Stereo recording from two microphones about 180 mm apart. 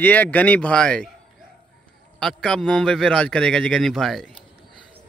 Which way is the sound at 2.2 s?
5° left (ahead or behind).